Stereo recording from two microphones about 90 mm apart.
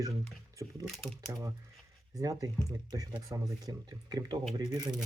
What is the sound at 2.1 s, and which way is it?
Speech, 40° right (ahead or behind).